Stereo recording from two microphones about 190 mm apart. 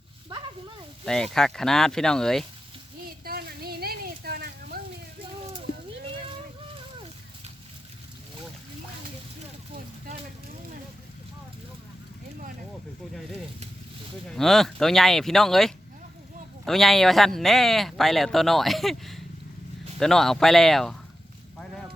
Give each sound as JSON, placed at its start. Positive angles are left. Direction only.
{"t": 1.0, "sound": "speech", "side_deg": 5}
{"t": 3.2, "sound": "a sound", "side_deg": -55}
{"t": 14.3, "sound": "speech", "side_deg": 0}